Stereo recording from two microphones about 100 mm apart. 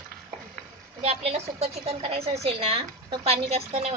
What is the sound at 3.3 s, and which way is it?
Speech, 90° right.